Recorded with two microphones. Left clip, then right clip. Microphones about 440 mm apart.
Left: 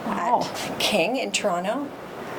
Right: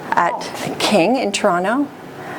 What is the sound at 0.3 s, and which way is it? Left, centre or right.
A woman's voice, right.